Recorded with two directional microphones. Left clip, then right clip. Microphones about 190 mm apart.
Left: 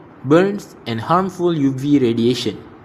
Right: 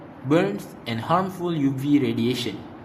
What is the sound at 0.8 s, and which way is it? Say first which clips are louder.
Speech: left 5 dB; 30° left (ahead or behind).